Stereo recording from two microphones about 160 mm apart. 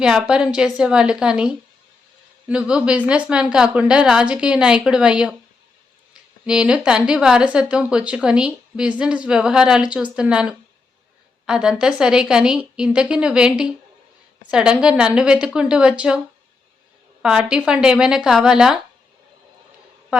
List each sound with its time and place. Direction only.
0.0 s a woman's voice: 5° right (ahead or behind)
6.4 s a woman's voice: 5° right (ahead or behind)
17.2 s a woman's voice: 5° right (ahead or behind)